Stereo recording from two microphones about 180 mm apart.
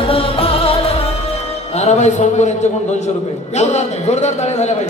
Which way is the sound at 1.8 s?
40° left (ahead or behind).